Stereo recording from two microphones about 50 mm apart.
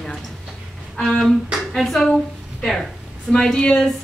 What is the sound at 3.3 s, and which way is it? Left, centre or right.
Speech, centre.